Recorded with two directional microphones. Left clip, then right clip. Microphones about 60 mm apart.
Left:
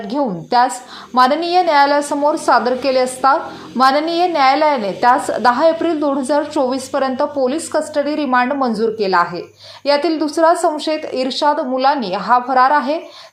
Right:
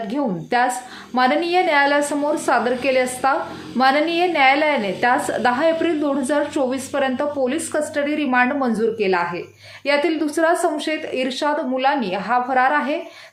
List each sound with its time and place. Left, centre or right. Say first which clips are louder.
0.1 s a woman's voice: left 6 dB; left
2.0 s a woman's voice: left 4 dB; left
2.5 s a woman's voice: left 3 dB; left
9.0 s a woman's voice: left 5 dB; left
9.8 s a woman's voice: left 3 dB; left
11.4 s a woman's voice: left 6 dB; left